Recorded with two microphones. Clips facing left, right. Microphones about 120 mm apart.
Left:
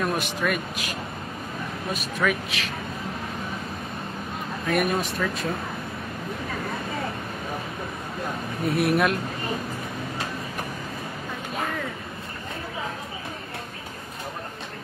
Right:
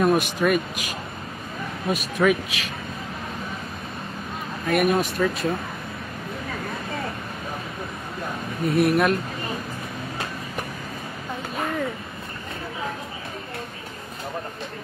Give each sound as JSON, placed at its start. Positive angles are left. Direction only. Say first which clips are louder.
{"t": 0.0, "sound": "speech", "louder": "right 6 dB", "side_deg": -20}
{"t": 2.2, "sound": "speech", "louder": "right 5 dB", "side_deg": -15}
{"t": 4.6, "sound": "speech", "louder": "right 4 dB", "side_deg": -5}
{"t": 8.6, "sound": "speech", "louder": "right 3 dB", "side_deg": 0}